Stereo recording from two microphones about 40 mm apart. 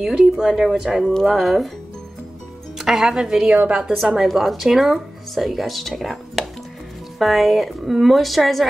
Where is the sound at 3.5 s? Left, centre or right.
Right.